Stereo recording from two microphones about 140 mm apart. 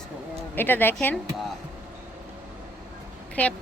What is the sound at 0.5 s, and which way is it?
Speech, 15° left (ahead or behind).